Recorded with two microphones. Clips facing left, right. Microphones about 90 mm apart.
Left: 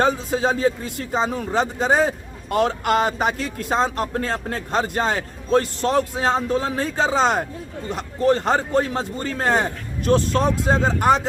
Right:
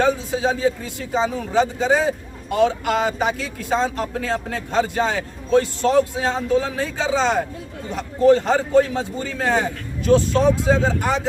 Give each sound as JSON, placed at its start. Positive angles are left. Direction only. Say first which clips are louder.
{"t": 0.0, "sound": "a man's voice", "louder": "even", "side_deg": 50}